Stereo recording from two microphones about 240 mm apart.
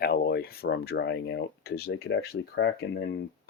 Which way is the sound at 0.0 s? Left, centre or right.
Left.